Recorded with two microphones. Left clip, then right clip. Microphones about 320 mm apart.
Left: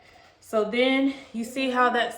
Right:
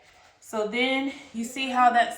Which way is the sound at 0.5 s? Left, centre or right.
Centre.